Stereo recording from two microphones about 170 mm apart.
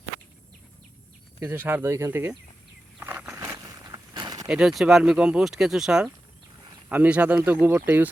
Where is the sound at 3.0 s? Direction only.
10° right (ahead or behind).